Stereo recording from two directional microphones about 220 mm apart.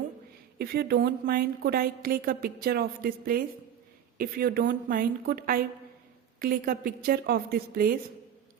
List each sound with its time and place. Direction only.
0.6 s a woman's voice: 45° right (ahead or behind)